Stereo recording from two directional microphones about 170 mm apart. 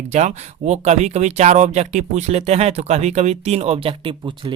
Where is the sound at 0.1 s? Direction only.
45° right (ahead or behind).